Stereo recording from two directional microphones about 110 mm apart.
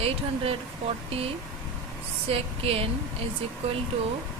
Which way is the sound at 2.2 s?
60° right (ahead or behind).